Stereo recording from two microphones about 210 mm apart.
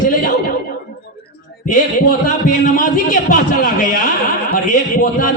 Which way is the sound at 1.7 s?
40° left (ahead or behind).